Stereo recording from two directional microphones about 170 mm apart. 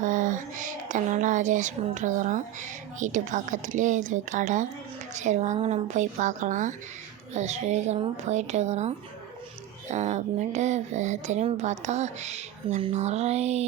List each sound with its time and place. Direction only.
0.0 s speech: 50° right (ahead or behind)